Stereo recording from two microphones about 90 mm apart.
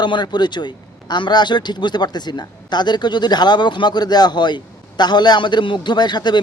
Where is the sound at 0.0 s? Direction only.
55° left (ahead or behind).